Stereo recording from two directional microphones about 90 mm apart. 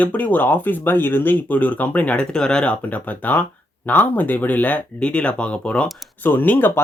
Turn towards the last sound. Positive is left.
turn(degrees=20)  # may be behind; listen again after turning